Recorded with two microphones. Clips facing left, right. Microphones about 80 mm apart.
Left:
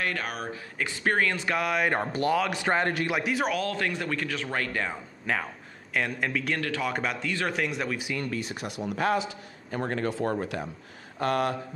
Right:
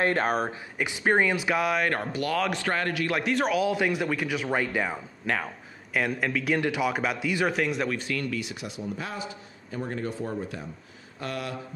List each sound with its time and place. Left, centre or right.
0.0 s speech: right
0.7 s a man's voice: centre
3.6 s speech: centre
5.2 s a man's voice: centre
6.6 s speech: centre
6.9 s a man's voice: centre
8.2 s speech: left
8.6 s a man's voice: left
11.1 s speech: left